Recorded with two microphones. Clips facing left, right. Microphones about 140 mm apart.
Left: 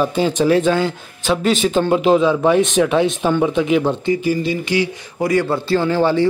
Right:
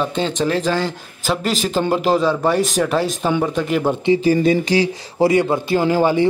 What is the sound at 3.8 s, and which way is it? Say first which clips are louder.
Speech: right 1 dB; 15° right (ahead or behind).